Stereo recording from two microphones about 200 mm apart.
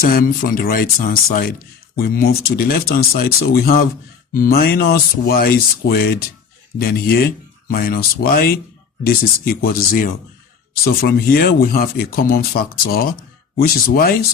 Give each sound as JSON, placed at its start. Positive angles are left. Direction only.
{"t": 0.0, "sound": "speech", "side_deg": 45}